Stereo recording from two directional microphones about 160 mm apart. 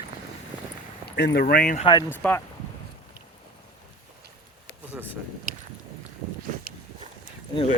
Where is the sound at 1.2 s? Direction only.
80° left.